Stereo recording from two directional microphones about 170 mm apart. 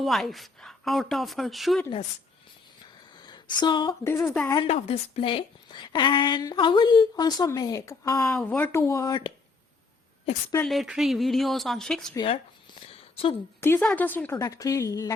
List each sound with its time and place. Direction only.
0.0 s a woman's voice: centre (ahead or behind)
3.2 s a sound: 25° left (ahead or behind)
4.0 s speech: 15° left (ahead or behind)
4.5 s a woman's voice: 35° left (ahead or behind)
10.7 s a woman's voice: centre (ahead or behind)
12.1 s a sound: 30° left (ahead or behind)
13.6 s a woman's voice: 10° left (ahead or behind)